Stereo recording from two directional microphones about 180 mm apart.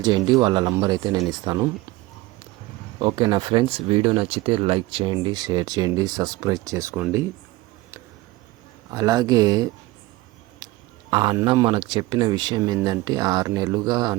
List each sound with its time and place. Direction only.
0.0 s speech: 20° right (ahead or behind)
3.0 s speech: 25° right (ahead or behind)
8.9 s speech: 20° right (ahead or behind)
10.6 s a sound: 20° right (ahead or behind)
11.1 s speech: 25° right (ahead or behind)